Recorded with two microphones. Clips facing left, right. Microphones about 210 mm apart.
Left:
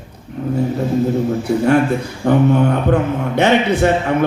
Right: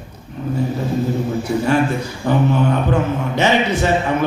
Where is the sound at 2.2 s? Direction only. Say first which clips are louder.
Left 4 dB; 60° left (ahead or behind).